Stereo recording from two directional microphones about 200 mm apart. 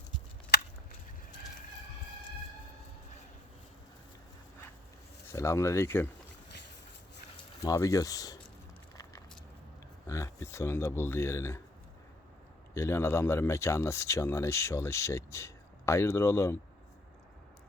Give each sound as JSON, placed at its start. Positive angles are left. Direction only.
{"t": 5.3, "sound": "speech", "side_deg": 15}
{"t": 7.6, "sound": "speech", "side_deg": 15}
{"t": 10.1, "sound": "speech", "side_deg": 15}
{"t": 12.7, "sound": "speech", "side_deg": 15}